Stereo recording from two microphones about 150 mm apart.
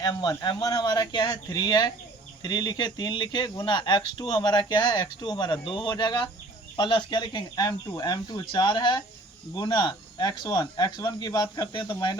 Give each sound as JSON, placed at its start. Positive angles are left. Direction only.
{"t": 0.0, "sound": "speech", "side_deg": 25}